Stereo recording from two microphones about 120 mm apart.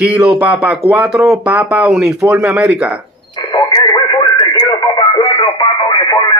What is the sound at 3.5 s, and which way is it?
Radio, 35° left (ahead or behind).